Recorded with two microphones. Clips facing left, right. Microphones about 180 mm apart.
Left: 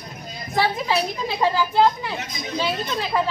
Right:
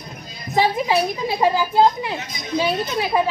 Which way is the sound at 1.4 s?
15° right (ahead or behind).